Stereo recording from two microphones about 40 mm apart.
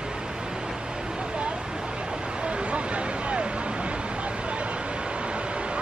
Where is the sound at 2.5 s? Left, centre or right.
Right.